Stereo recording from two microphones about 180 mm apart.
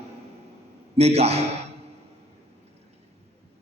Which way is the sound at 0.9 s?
35° right (ahead or behind).